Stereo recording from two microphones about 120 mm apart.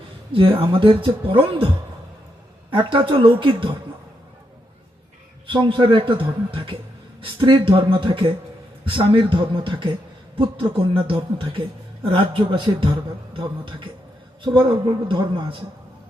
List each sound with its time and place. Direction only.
0.3 s a man's voice: 45° right (ahead or behind)
5.5 s a man's voice: 45° right (ahead or behind)